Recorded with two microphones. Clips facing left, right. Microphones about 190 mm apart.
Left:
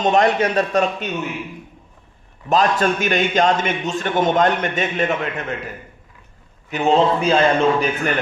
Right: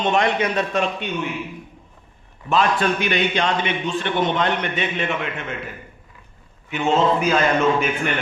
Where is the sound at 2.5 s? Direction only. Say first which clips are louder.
Left 2 dB; 40° left (ahead or behind).